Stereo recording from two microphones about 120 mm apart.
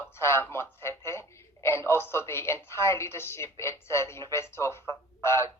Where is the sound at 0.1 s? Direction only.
20° left (ahead or behind).